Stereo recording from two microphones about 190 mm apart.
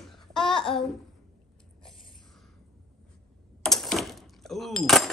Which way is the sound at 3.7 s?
Centre (ahead or behind).